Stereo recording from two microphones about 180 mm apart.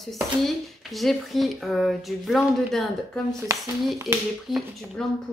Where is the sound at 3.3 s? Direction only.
15° right (ahead or behind).